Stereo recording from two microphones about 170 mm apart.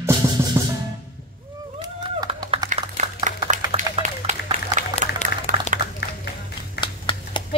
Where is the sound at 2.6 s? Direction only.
50° right (ahead or behind).